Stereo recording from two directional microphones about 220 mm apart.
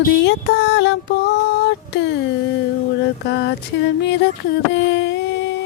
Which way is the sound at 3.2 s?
50° left (ahead or behind).